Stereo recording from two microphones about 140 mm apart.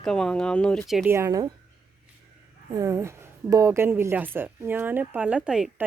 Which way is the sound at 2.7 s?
20° right (ahead or behind).